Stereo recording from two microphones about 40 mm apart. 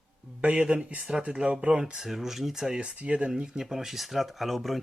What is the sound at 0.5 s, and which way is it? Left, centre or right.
Speech, right.